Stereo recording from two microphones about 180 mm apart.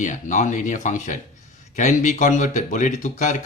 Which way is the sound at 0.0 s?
45° left (ahead or behind).